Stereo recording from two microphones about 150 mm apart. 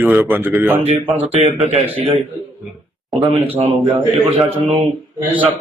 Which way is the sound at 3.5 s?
45° right (ahead or behind).